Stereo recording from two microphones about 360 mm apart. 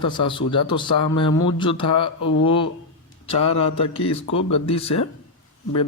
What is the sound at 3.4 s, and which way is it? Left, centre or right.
Speech, centre.